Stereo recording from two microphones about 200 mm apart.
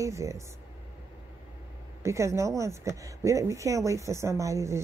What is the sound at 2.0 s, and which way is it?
Speech, 15° right (ahead or behind).